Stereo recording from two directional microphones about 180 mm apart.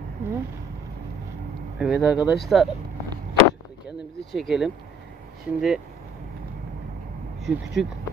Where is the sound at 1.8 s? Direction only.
5° right (ahead or behind).